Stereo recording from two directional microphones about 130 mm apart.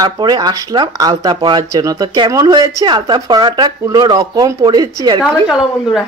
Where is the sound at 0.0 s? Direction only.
30° right (ahead or behind).